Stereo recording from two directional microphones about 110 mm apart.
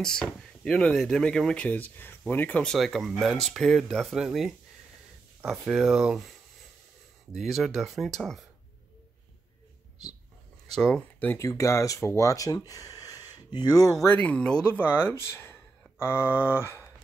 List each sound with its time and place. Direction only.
0.0 s speech: 5° left (ahead or behind)
2.7 s speech: centre (ahead or behind)
7.3 s speech: centre (ahead or behind)
10.7 s speech: 5° left (ahead or behind)
11.3 s speech: 30° left (ahead or behind)
14.0 s speech: 15° left (ahead or behind)